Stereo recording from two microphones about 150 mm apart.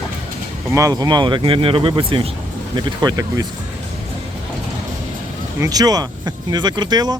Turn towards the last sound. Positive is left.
turn(degrees=-30)  # may be behind; listen again after turning